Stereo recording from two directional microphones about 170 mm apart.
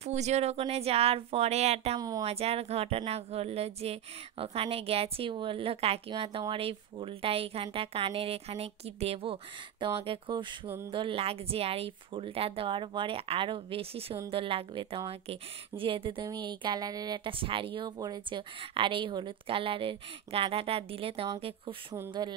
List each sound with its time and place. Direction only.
0.0 s speech: 40° right (ahead or behind)
2.0 s a woman's voice: 20° right (ahead or behind)
2.2 s speech: 35° right (ahead or behind)